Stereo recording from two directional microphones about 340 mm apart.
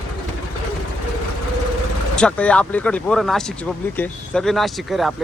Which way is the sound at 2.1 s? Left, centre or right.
Centre.